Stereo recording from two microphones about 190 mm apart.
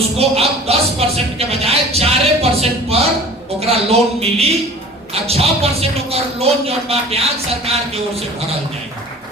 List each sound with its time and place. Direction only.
0.2 s speech: 30° right (ahead or behind)